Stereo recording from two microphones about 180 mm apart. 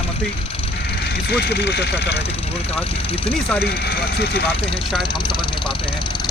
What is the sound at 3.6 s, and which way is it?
Speech, 60° left (ahead or behind).